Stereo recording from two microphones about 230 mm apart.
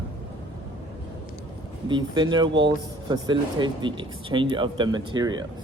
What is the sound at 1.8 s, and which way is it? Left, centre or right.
Speech, centre.